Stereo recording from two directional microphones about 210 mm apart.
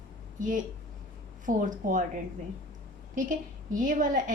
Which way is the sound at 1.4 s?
40° right (ahead or behind).